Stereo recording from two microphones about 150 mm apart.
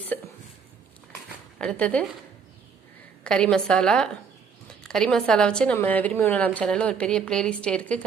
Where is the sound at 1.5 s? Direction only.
10° left (ahead or behind).